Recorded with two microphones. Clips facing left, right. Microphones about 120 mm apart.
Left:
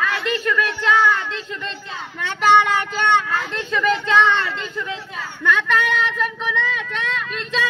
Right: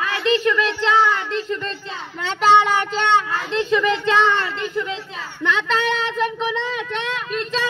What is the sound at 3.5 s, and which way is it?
Speech, 20° right (ahead or behind).